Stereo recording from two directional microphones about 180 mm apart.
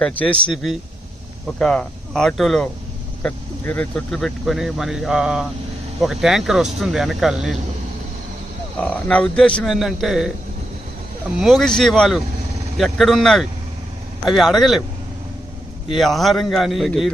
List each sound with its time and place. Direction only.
0.0 s speech: 5° left (ahead or behind)
8.8 s speech: 5° left (ahead or behind)
11.3 s speech: centre (ahead or behind)
16.0 s speech: centre (ahead or behind)